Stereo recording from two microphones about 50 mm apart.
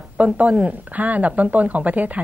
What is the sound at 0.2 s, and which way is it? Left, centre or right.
A woman's voice, right.